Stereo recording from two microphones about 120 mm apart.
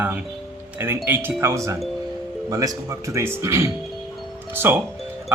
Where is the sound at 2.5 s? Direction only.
25° right (ahead or behind).